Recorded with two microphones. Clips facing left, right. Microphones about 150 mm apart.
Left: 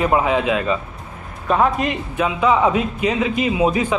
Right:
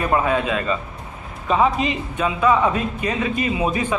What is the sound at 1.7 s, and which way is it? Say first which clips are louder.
Speech: left 1 dB; 55° left (ahead or behind).